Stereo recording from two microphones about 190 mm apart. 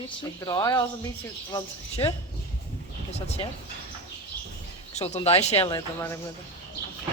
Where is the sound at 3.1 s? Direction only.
35° left (ahead or behind).